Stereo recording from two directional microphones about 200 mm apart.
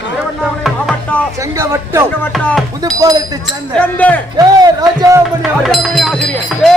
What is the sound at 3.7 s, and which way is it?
Speech, 5° left (ahead or behind).